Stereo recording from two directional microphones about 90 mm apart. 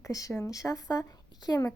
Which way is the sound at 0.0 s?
40° left (ahead or behind).